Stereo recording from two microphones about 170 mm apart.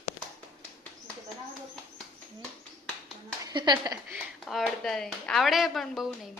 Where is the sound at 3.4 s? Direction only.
25° right (ahead or behind).